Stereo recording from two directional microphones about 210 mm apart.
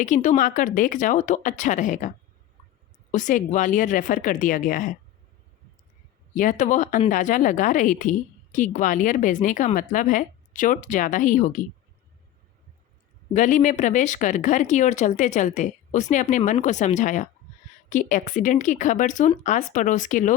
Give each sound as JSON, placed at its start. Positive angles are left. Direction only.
{"t": 0.0, "sound": "speech", "side_deg": 35}
{"t": 6.3, "sound": "speech", "side_deg": 40}
{"t": 13.3, "sound": "speech", "side_deg": 35}